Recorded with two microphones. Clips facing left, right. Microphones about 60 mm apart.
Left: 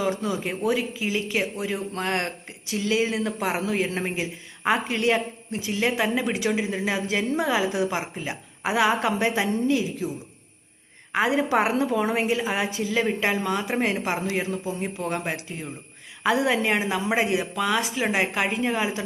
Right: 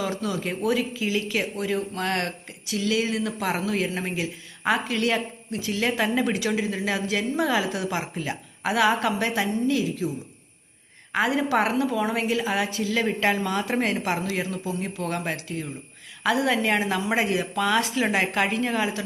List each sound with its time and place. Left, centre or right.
0.0 s speech: left
6.3 s speech: left
11.1 s a woman's voice: left